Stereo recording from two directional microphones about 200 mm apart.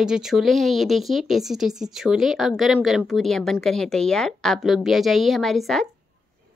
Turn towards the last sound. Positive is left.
turn(degrees=0)  # may be behind; listen again after turning